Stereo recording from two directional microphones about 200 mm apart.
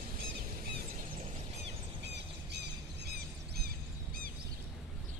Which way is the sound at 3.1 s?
50° right (ahead or behind).